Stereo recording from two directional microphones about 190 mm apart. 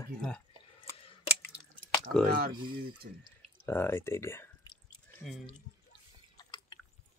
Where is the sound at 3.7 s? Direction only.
10° left (ahead or behind).